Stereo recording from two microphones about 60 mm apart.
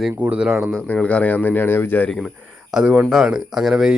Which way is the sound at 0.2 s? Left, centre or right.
Right.